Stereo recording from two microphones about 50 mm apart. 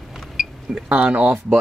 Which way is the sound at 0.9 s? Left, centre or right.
Right.